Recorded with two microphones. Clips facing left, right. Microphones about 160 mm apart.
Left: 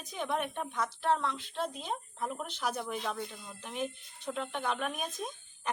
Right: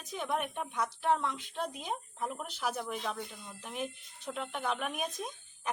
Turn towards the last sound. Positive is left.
turn(degrees=-5)  # may be behind; listen again after turning